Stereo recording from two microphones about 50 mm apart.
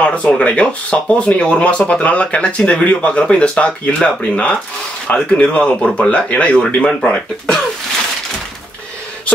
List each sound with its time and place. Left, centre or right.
0.0 s speech: left